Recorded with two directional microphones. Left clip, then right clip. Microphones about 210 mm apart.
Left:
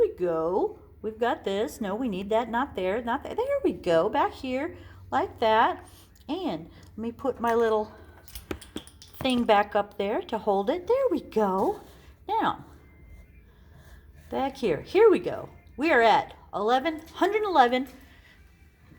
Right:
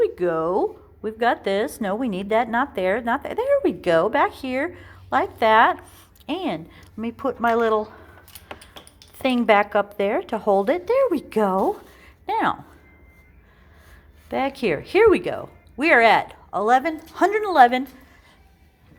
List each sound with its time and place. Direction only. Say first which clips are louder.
0.0 s speech: right 4 dB; 20° right (ahead or behind)
9.2 s speech: right 5 dB; 20° right (ahead or behind)
12.2 s a sound: right 4 dB; 20° right (ahead or behind)
14.3 s speech: right 5 dB; 20° right (ahead or behind)